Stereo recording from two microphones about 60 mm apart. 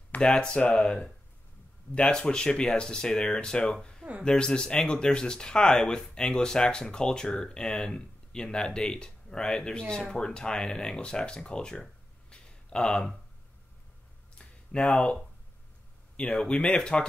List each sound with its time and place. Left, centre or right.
0.2 s speech: centre
12.3 s a sound: centre
14.8 s speech: centre
16.2 s speech: centre